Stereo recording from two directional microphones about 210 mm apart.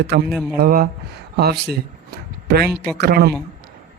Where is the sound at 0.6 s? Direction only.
45° right (ahead or behind).